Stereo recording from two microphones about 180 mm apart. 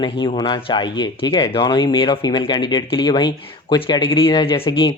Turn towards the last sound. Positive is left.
turn(degrees=25)  # may be behind; listen again after turning